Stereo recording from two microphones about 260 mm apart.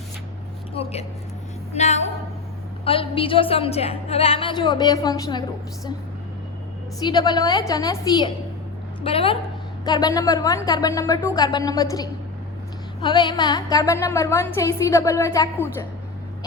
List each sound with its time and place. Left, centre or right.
0.7 s a sound: left
1.7 s a woman's voice: left
7.0 s a woman's voice: centre